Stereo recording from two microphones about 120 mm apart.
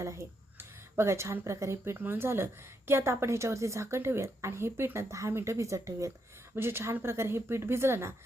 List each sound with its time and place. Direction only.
0.0 s a woman's voice: 25° right (ahead or behind)